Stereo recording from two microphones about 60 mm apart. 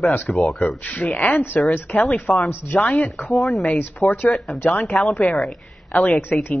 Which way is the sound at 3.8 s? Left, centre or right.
Left.